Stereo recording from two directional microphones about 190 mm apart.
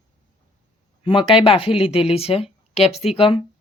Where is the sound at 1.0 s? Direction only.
25° left (ahead or behind).